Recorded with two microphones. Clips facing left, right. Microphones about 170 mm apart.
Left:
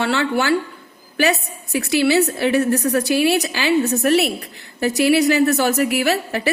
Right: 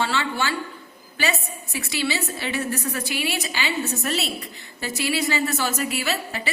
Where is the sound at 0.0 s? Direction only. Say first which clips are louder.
Left 6 dB; 65° left (ahead or behind).